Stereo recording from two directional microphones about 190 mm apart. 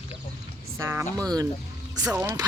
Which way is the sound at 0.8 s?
15° right (ahead or behind).